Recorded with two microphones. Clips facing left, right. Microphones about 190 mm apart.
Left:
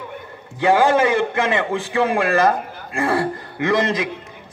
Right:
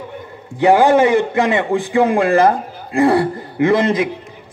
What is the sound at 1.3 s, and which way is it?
A man's voice, 20° right (ahead or behind).